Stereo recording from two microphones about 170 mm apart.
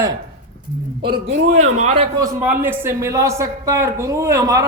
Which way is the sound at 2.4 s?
10° right (ahead or behind).